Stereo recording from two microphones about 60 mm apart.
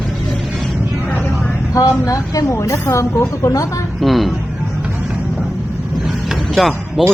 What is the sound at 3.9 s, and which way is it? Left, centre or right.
Speech, centre.